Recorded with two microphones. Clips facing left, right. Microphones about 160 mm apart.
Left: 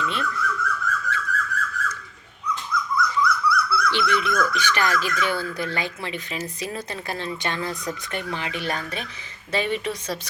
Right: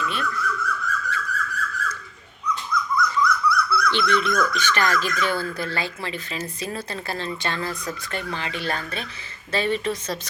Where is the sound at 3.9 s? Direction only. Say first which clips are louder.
Right 2 dB; 10° left (ahead or behind).